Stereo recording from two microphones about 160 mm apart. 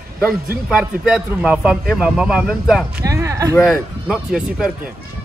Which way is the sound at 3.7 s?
5° right (ahead or behind).